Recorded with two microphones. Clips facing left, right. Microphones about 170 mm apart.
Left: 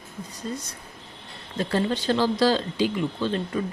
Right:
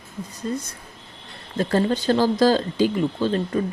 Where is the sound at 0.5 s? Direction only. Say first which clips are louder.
Right 6 dB; 50° right (ahead or behind).